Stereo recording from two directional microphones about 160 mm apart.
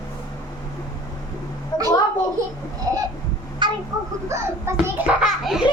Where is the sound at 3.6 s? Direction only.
30° right (ahead or behind).